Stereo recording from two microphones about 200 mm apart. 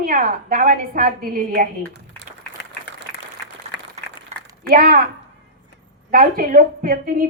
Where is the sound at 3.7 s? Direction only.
55° left (ahead or behind).